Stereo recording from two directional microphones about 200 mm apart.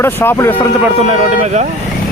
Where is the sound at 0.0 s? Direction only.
10° left (ahead or behind).